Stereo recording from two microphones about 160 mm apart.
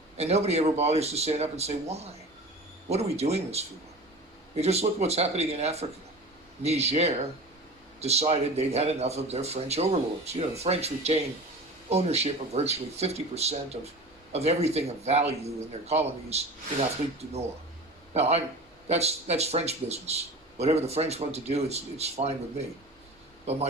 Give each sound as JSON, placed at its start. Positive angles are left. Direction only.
{"t": 0.2, "sound": "speech", "side_deg": -40}
{"t": 18.1, "sound": "speech", "side_deg": -40}